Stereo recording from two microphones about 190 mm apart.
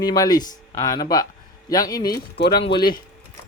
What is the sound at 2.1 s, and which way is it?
Speech, 55° left (ahead or behind).